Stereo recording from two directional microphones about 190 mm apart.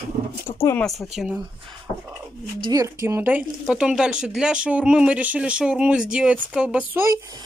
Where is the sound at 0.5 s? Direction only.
15° left (ahead or behind).